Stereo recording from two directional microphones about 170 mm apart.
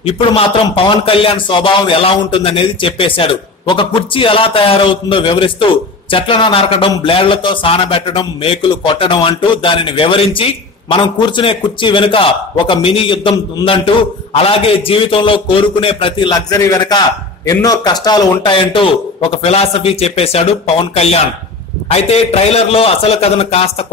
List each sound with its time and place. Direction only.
0.0 s speech: 35° left (ahead or behind)